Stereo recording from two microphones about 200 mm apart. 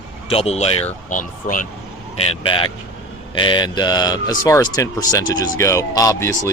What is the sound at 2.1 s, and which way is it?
Speech, 30° left (ahead or behind).